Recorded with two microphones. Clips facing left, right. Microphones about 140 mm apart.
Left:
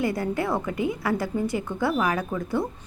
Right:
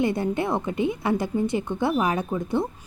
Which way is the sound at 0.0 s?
25° right (ahead or behind).